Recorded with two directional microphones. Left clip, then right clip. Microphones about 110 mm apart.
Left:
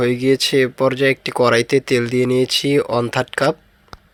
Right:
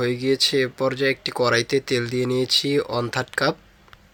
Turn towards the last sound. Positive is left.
turn(degrees=40)  # may be behind; listen again after turning